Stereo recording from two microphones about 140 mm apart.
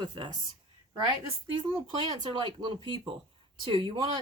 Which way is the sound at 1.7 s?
40° right (ahead or behind).